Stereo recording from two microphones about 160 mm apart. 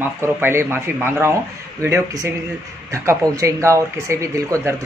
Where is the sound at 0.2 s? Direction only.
15° right (ahead or behind).